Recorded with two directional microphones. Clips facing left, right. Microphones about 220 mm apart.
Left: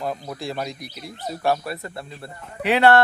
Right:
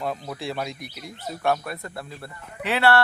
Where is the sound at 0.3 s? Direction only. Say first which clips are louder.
Left 1 dB; centre (ahead or behind).